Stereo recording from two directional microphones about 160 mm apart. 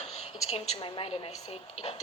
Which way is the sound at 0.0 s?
40° left (ahead or behind).